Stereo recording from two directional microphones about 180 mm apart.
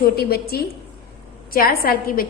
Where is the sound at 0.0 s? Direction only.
60° left (ahead or behind).